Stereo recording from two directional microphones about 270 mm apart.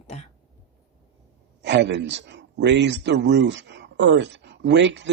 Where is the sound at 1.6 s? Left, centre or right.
Right.